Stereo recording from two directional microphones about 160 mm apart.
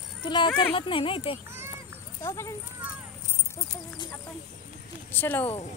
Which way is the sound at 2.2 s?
20° left (ahead or behind).